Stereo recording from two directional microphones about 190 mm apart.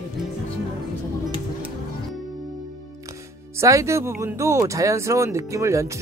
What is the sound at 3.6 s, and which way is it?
Speech, 15° right (ahead or behind).